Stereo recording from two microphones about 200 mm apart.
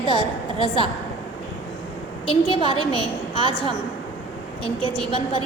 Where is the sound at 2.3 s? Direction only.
25° left (ahead or behind).